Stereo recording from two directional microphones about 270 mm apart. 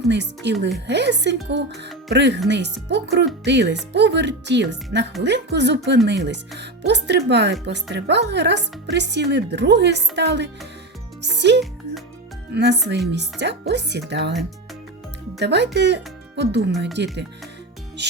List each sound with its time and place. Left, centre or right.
0.1 s a woman's voice: right
12.5 s a woman's voice: right
15.4 s a woman's voice: right